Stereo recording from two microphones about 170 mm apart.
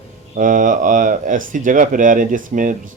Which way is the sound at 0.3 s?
50° right (ahead or behind).